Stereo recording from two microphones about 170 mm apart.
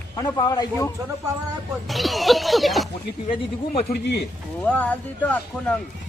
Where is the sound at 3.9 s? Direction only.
75° left (ahead or behind).